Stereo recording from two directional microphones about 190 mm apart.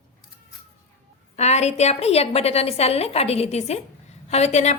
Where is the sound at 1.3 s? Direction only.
35° left (ahead or behind).